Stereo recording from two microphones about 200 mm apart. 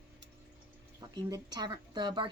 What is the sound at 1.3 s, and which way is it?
Speech, 20° right (ahead or behind).